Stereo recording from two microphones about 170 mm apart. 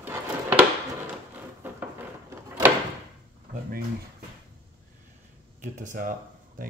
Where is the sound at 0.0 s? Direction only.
10° right (ahead or behind).